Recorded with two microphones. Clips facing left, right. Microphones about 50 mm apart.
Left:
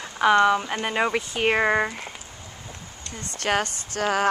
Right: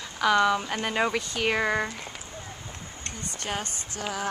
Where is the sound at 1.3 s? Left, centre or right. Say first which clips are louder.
Left 5 dB; left.